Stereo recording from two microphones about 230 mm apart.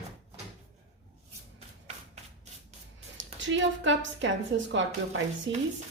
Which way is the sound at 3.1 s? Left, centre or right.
Right.